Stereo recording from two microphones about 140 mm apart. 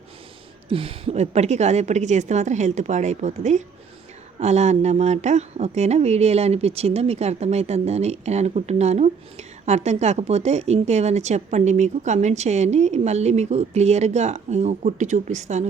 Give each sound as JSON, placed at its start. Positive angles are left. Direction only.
{"t": 0.7, "sound": "a woman's voice", "side_deg": -40}